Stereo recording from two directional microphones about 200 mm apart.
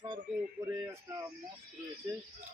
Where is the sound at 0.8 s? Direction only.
15° right (ahead or behind).